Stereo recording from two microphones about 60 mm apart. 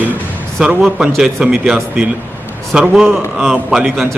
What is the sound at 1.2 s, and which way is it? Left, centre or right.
A man's voice, centre.